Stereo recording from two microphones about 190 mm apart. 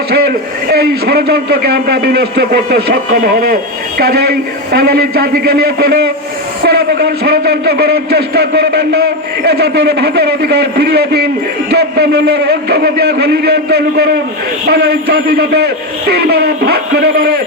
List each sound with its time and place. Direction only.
0.1 s a man's voice: 55° right (ahead or behind)